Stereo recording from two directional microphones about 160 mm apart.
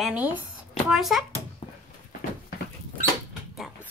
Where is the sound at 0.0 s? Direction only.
5° right (ahead or behind).